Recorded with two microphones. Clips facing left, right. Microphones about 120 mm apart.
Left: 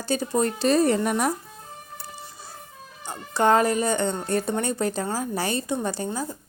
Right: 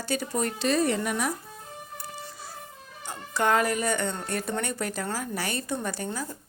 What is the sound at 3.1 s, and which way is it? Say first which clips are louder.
Speech: left 5 dB; 30° left (ahead or behind).